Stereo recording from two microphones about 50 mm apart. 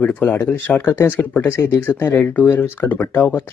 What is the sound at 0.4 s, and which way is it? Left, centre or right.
Speech, left.